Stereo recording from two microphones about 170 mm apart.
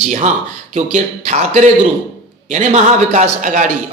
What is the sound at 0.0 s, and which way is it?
A man's voice, 45° right (ahead or behind).